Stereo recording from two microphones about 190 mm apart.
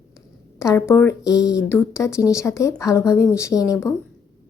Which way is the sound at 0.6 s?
15° left (ahead or behind).